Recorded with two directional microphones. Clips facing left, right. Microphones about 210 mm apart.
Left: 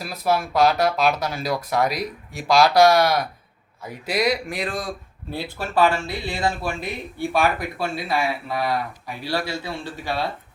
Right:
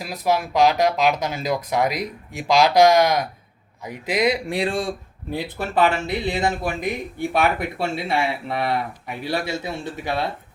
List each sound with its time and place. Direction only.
0.0 s speech: 15° right (ahead or behind)